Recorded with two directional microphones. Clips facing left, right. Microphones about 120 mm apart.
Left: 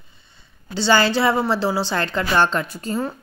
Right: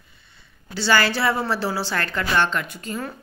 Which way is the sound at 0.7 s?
25° left (ahead or behind).